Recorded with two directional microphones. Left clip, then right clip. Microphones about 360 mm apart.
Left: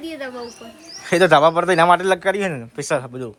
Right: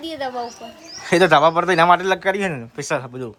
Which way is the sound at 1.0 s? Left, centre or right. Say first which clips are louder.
Even; centre.